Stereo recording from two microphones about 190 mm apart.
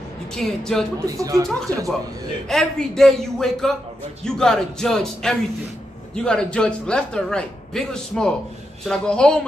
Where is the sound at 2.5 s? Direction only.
Centre (ahead or behind).